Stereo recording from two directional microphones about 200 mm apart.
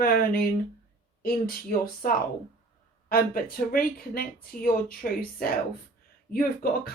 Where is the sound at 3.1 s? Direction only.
45° left (ahead or behind).